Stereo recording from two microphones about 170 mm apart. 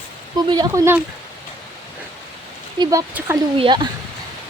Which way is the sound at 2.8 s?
20° right (ahead or behind).